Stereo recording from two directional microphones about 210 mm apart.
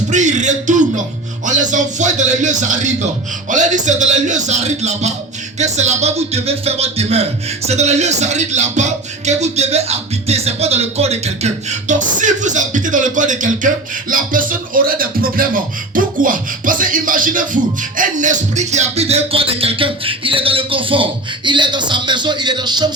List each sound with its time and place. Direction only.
0.1 s a man's voice: 35° right (ahead or behind)
14.1 s music: 40° right (ahead or behind); by 22.9 s 20° right (ahead or behind)